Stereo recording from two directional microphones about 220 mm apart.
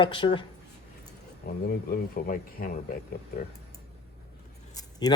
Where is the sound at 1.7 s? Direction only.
40° left (ahead or behind).